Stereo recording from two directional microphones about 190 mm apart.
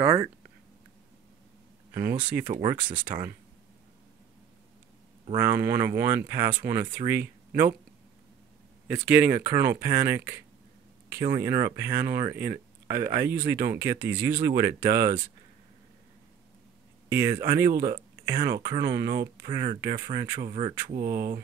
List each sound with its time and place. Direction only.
0.0 s a sound: 20° right (ahead or behind)
2.5 s speech: 25° right (ahead or behind)
5.3 s speech: 15° right (ahead or behind)
8.8 s speech: 5° right (ahead or behind)
17.1 s speech: 10° right (ahead or behind); by 21.0 s 30° right (ahead or behind)
21.0 s speech: 50° right (ahead or behind)